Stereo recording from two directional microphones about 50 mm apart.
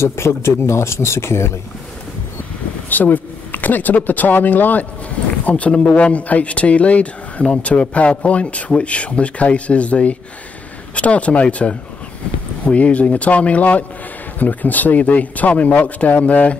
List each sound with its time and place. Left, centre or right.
0.0 s speech: left
2.9 s speech: left
5.4 s a man's voice: left